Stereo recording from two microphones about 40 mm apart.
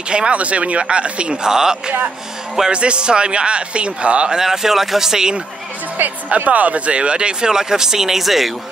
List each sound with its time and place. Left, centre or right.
0.1 s speech: right
1.5 s speech: centre
4.4 s speech: centre
6.2 s speech: right; by 8.5 s centre